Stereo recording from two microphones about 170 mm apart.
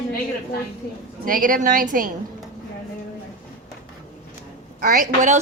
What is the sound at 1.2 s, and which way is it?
Speech, 55° right (ahead or behind).